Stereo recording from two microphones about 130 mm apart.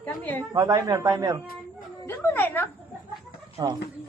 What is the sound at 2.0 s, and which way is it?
Speech, 15° left (ahead or behind).